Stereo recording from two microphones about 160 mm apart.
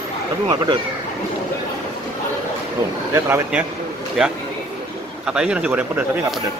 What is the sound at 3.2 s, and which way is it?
Speech, 15° right (ahead or behind).